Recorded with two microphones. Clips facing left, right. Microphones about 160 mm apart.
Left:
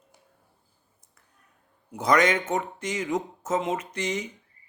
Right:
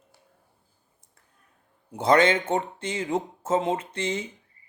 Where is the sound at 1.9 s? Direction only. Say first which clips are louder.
Right 2 dB; 30° right (ahead or behind).